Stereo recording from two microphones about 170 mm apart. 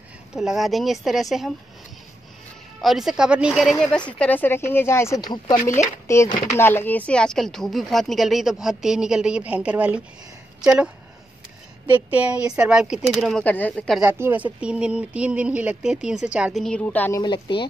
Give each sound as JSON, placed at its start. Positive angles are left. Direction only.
{"t": 0.3, "sound": "speech", "side_deg": 0}
{"t": 2.8, "sound": "speech", "side_deg": 0}
{"t": 4.2, "sound": "speech", "side_deg": 10}
{"t": 5.6, "sound": "speech", "side_deg": 45}
{"t": 6.5, "sound": "speech", "side_deg": 15}
{"t": 11.9, "sound": "speech", "side_deg": -10}
{"t": 14.0, "sound": "speech", "side_deg": -10}
{"t": 16.6, "sound": "speech", "side_deg": 10}
{"t": 17.2, "sound": "a woman's voice", "side_deg": 30}